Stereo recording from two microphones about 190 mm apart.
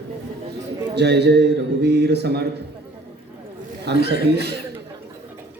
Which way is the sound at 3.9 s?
60° right (ahead or behind).